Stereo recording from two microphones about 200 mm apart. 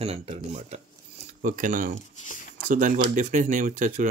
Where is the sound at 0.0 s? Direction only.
30° right (ahead or behind).